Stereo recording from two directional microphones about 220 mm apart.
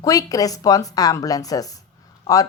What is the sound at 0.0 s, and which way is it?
A woman's voice, 15° left (ahead or behind).